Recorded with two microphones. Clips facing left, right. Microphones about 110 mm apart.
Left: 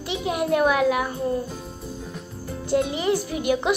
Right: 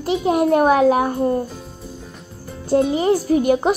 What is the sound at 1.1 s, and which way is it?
Speech, 55° right (ahead or behind).